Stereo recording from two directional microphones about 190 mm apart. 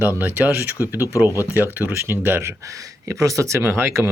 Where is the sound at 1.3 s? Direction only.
15° left (ahead or behind).